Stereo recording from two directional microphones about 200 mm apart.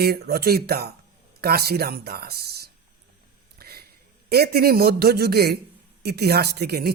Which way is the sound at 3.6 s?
50° right (ahead or behind).